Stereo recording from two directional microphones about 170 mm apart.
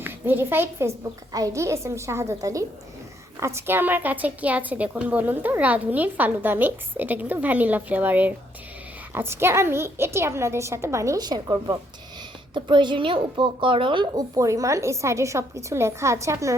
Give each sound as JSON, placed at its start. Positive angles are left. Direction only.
{"t": 0.0, "sound": "a woman's voice", "side_deg": -10}